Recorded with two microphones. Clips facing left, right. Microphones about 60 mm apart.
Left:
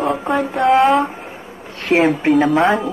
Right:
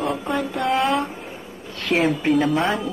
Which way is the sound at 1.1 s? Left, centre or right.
Left.